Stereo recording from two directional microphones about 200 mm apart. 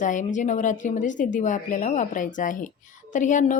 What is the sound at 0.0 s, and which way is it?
A woman's voice, 40° left (ahead or behind).